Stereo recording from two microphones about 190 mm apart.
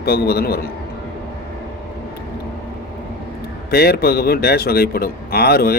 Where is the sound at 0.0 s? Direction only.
55° left (ahead or behind).